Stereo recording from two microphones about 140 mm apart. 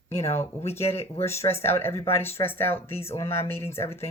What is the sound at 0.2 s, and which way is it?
Speech, 50° left (ahead or behind).